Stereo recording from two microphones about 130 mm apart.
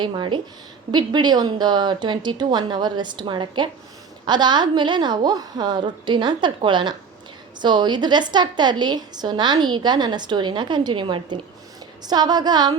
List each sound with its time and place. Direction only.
0.0 s a woman's voice: 35° right (ahead or behind)